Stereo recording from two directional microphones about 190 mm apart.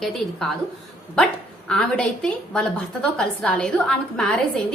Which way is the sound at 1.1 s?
5° left (ahead or behind).